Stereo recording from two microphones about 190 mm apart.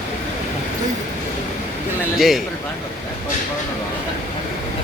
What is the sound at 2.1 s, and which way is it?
Speech, centre (ahead or behind).